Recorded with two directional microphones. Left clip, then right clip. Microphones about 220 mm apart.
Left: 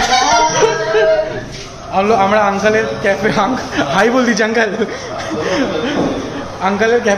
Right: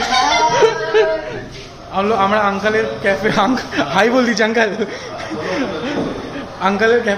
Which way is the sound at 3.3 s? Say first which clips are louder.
Left 1 dB; 50° right (ahead or behind).